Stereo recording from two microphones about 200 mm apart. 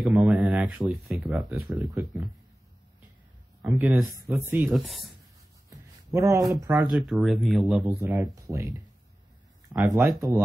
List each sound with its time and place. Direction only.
0.0 s speech: 5° right (ahead or behind)
3.6 s speech: 10° right (ahead or behind)
6.1 s speech: 15° right (ahead or behind)
7.1 s speech: centre (ahead or behind)
7.8 s speech: 15° right (ahead or behind)
9.8 s speech: centre (ahead or behind)